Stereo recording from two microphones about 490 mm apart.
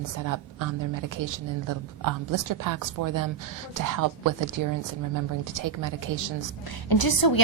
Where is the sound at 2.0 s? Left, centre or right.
Right.